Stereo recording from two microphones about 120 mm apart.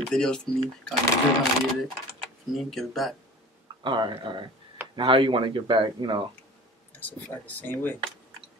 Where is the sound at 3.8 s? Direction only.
40° right (ahead or behind).